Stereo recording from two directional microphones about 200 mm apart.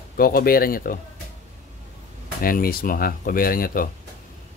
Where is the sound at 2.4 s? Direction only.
45° left (ahead or behind).